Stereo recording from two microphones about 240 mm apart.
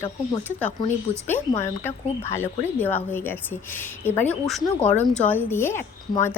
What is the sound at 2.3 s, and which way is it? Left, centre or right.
Speech, centre.